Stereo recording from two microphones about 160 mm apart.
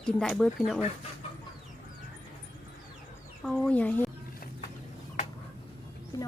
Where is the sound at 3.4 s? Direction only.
5° left (ahead or behind).